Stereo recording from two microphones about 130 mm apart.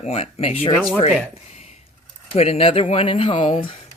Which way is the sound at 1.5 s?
55° left (ahead or behind).